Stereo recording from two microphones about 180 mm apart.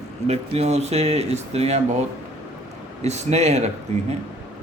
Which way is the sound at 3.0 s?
40° right (ahead or behind).